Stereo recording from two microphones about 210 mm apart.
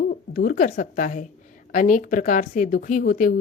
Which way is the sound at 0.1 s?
45° left (ahead or behind).